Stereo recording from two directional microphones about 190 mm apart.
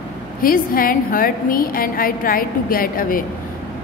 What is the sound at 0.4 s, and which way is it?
A woman's voice, 50° left (ahead or behind).